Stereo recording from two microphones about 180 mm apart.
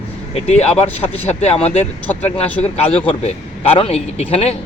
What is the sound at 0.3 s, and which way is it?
Speech, 35° left (ahead or behind).